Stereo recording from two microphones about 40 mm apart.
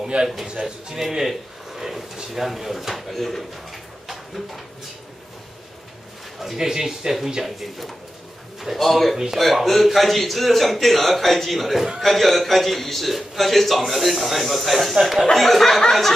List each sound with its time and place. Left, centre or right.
0.1 s a man's voice: right; by 4.2 s centre
6.4 s speech: centre
7.4 s a man's voice: centre
15.8 s a sound: centre